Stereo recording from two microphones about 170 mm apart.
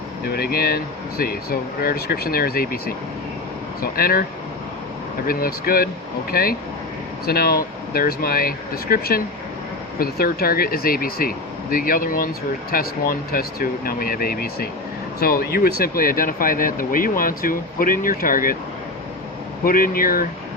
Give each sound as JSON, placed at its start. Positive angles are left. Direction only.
{"t": 0.3, "sound": "speech", "side_deg": 65}
{"t": 19.6, "sound": "speech", "side_deg": 55}